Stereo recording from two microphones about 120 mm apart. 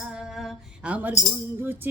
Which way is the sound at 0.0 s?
5° right (ahead or behind).